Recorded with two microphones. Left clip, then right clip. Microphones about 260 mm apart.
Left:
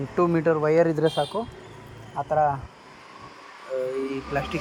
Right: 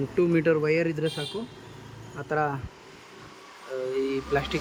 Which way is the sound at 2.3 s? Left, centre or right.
Centre.